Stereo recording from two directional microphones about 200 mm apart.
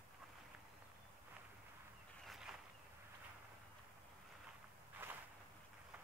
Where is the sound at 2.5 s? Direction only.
Centre (ahead or behind).